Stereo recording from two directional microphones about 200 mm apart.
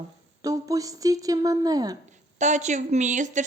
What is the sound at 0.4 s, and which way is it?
Speech, 15° right (ahead or behind).